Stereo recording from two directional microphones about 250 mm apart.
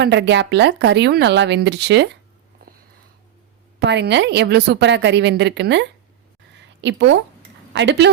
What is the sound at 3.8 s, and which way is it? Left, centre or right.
A woman's voice, right.